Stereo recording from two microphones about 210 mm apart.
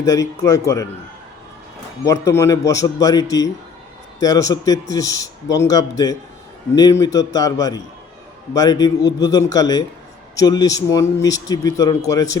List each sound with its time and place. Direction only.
0.0 s speech: 15° left (ahead or behind)
2.0 s speech: 15° left (ahead or behind)